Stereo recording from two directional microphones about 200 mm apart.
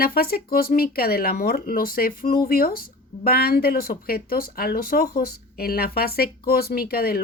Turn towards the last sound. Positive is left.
turn(degrees=50)  # may be behind; listen again after turning